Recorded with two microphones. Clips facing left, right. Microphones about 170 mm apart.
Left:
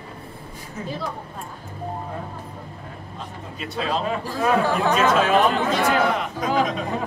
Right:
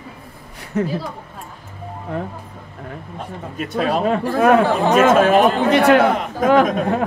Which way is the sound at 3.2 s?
55° right (ahead or behind).